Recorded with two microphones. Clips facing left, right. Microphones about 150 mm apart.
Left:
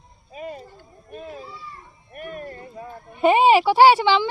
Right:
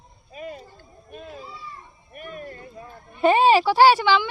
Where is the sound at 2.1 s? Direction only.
50° left (ahead or behind).